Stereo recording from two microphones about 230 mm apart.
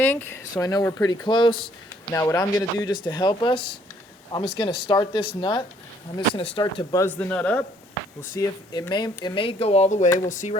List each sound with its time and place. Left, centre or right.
0.0 s speech: centre; by 10.6 s left